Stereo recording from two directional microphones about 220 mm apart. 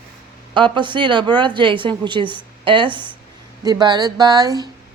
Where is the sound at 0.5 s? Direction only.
20° right (ahead or behind).